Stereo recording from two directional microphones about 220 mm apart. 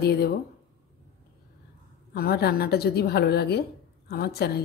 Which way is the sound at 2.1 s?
45° left (ahead or behind).